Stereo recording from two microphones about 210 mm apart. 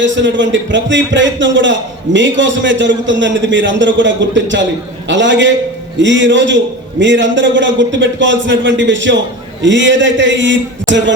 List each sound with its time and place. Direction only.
0.0 s speech: 60° right (ahead or behind)